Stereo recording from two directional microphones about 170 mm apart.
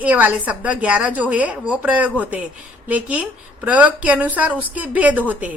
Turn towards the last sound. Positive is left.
turn(degrees=-10)  # may be behind; listen again after turning